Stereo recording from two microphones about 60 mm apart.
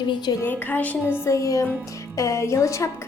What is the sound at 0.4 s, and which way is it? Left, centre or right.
Speech, left.